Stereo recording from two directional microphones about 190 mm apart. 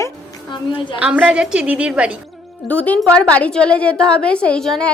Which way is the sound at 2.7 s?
10° left (ahead or behind).